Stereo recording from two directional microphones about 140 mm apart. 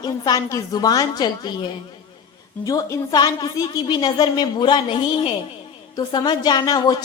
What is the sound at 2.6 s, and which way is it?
A woman's voice, 25° left (ahead or behind).